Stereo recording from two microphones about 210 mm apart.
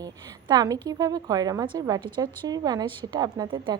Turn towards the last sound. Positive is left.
turn(degrees=-20)  # may be behind; listen again after turning